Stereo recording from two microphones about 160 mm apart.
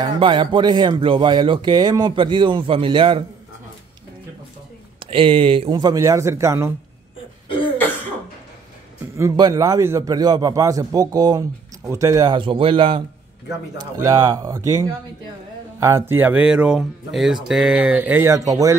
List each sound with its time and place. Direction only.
0.0 s speech: 30° right (ahead or behind)
5.1 s a man's voice: 35° right (ahead or behind); by 6.7 s 15° right (ahead or behind)
9.1 s a man's voice: 20° right (ahead or behind)
13.5 s a man's voice: 20° right (ahead or behind)